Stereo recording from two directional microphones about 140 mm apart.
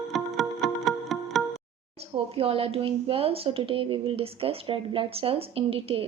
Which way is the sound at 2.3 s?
45° right (ahead or behind).